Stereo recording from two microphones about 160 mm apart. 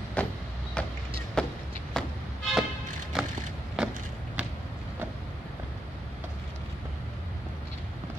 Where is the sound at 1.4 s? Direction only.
5° left (ahead or behind).